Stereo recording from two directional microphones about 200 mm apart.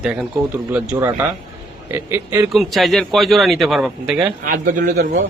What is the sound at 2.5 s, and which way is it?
A man's voice, centre (ahead or behind).